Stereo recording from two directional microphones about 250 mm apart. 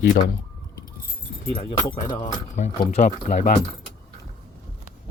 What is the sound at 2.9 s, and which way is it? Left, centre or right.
Speech, left.